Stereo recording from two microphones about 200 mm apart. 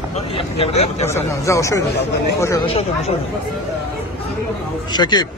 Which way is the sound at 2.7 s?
30° left (ahead or behind).